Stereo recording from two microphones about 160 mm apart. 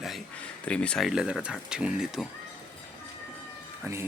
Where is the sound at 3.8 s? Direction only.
15° right (ahead or behind).